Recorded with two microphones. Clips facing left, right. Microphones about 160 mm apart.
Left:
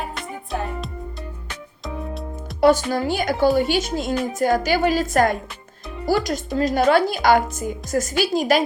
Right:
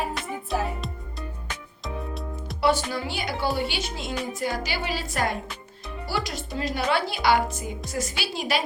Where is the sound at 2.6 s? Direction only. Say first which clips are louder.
Left 7 dB; 45° left (ahead or behind).